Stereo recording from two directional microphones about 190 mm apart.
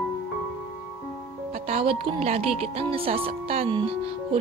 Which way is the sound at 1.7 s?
30° right (ahead or behind).